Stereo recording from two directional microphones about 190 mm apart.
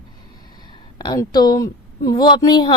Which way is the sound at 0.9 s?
20° left (ahead or behind).